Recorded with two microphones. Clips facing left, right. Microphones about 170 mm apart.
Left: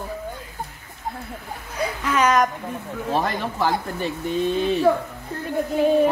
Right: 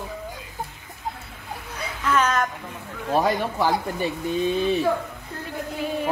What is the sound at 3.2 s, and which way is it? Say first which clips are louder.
Speech: right 1 dB; 10° right (ahead or behind).